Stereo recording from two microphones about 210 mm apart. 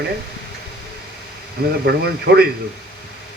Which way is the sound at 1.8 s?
50° right (ahead or behind).